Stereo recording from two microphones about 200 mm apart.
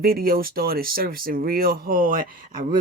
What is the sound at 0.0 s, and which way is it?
Speech, 50° right (ahead or behind).